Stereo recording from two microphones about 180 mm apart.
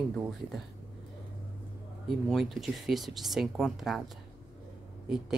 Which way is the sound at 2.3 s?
Centre (ahead or behind).